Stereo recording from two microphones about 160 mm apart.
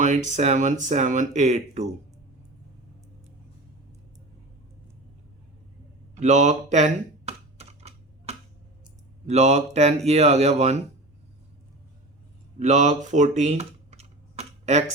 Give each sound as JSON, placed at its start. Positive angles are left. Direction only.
{"t": 0.0, "sound": "speech", "side_deg": -50}
{"t": 6.1, "sound": "typing", "side_deg": -50}
{"t": 9.2, "sound": "speech", "side_deg": -45}
{"t": 12.5, "sound": "computer keyboard", "side_deg": -45}